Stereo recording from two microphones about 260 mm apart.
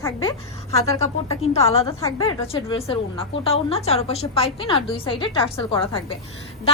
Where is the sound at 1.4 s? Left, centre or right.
Left.